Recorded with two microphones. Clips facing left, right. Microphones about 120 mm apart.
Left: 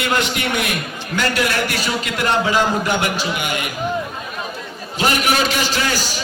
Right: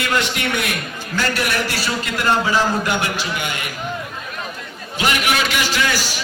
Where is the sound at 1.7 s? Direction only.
20° left (ahead or behind).